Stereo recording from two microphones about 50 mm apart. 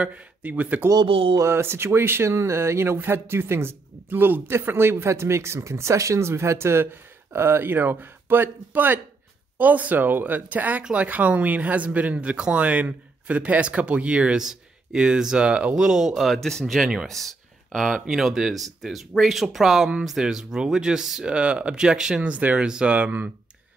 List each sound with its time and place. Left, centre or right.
0.0 s speech: right
1.4 s speech: right
2.3 s speech: right
4.5 s speech: right; by 16.1 s centre
16.1 s speech: centre
16.3 s speech: centre
21.3 s speech: right